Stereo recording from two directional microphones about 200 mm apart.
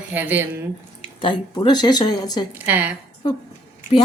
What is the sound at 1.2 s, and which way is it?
A woman's voice, 25° left (ahead or behind).